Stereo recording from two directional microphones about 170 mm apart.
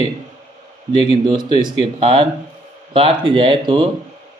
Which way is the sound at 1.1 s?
30° right (ahead or behind).